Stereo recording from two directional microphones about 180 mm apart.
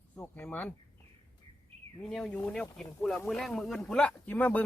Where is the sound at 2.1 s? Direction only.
5° left (ahead or behind).